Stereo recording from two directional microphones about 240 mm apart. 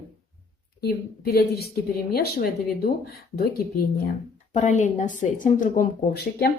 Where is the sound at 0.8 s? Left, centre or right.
Left.